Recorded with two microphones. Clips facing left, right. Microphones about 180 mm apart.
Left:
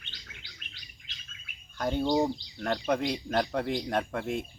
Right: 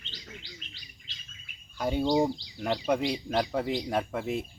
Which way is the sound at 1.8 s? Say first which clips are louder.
Right 1 dB; 5° right (ahead or behind).